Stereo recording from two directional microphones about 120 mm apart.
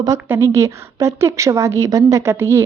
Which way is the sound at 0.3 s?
20° right (ahead or behind).